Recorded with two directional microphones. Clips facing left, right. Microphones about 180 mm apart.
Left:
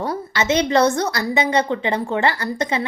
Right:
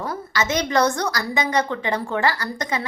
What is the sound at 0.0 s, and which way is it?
A woman's voice, 30° left (ahead or behind).